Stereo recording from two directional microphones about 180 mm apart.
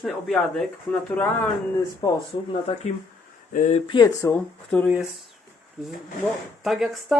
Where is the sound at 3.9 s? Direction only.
20° left (ahead or behind).